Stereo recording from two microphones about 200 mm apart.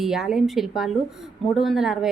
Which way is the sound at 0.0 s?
Centre (ahead or behind).